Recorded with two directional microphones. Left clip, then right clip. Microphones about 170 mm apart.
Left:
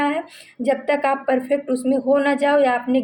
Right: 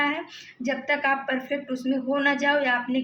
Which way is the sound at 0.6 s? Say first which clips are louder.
Left 6 dB; 50° left (ahead or behind).